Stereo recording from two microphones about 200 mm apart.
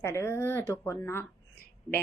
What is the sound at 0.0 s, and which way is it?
A woman's voice, 15° left (ahead or behind).